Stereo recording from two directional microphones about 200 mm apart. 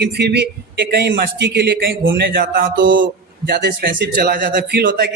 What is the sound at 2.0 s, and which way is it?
Speech, 70° right (ahead or behind).